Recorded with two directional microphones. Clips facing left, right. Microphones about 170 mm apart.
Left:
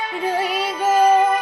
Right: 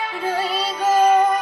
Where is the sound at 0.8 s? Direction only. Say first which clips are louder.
Even; 10° left (ahead or behind).